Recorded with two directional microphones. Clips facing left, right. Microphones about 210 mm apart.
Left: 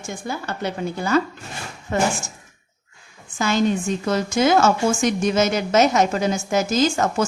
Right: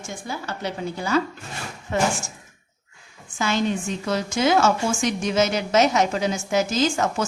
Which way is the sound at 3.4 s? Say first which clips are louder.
Left 3 dB; 45° left (ahead or behind).